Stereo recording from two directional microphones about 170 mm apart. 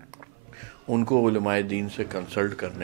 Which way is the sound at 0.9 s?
15° right (ahead or behind).